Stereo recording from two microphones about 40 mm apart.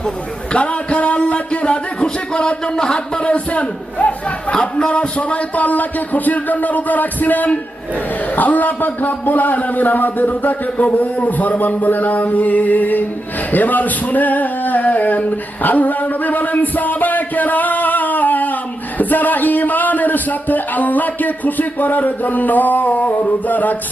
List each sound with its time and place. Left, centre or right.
0.5 s a man's voice: left
13.5 s male singing: left
15.6 s a man's voice: left